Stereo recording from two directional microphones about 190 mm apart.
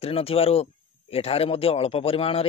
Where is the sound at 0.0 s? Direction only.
30° left (ahead or behind).